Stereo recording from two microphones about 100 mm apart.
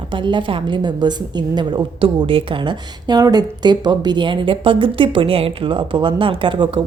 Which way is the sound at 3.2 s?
45° right (ahead or behind).